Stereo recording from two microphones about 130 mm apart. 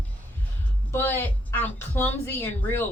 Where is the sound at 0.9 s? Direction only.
15° left (ahead or behind).